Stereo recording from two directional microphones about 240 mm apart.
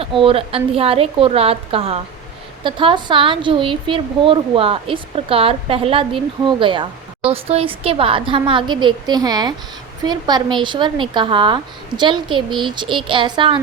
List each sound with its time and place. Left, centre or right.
0.0 s a woman's voice: right